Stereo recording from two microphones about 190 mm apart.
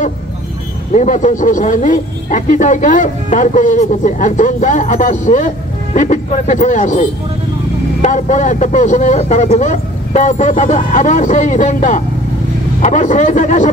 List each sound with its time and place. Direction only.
0.9 s speech: 40° left (ahead or behind)